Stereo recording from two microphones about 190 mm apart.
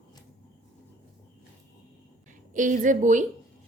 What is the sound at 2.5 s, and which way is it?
Speech, 45° right (ahead or behind).